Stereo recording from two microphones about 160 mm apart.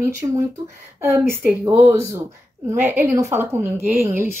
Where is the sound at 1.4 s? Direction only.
10° right (ahead or behind).